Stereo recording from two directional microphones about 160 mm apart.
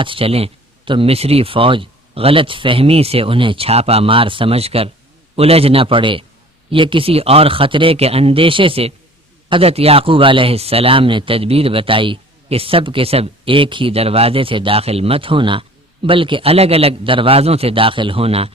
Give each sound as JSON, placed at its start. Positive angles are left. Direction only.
{"t": 0.0, "sound": "a man's voice", "side_deg": -35}